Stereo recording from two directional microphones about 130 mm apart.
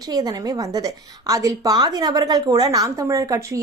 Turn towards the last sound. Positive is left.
turn(degrees=-25)  # may be behind; listen again after turning